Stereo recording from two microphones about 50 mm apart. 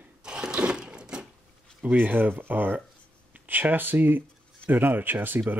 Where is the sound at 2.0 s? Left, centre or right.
Right.